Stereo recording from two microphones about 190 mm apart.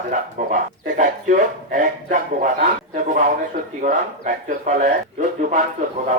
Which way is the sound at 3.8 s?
40° right (ahead or behind).